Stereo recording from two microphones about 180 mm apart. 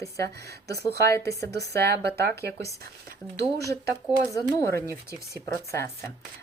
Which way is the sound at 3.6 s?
15° left (ahead or behind).